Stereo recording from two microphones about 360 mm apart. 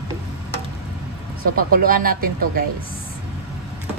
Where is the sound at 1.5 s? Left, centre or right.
Right.